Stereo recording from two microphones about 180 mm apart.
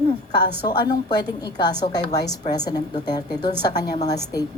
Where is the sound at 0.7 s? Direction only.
25° left (ahead or behind).